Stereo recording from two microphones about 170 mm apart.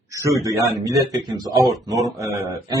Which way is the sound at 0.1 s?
20° right (ahead or behind).